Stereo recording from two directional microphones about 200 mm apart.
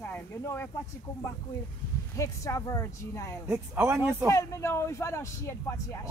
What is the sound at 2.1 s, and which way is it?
Speech, 15° left (ahead or behind).